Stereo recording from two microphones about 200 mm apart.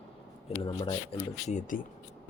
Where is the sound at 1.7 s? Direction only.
40° left (ahead or behind).